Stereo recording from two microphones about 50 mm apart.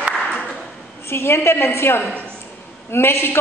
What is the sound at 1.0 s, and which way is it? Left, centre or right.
A woman's voice, left.